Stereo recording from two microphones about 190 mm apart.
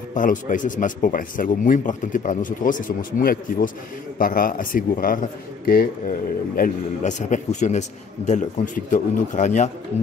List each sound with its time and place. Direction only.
0.1 s a man's voice: 45° left (ahead or behind)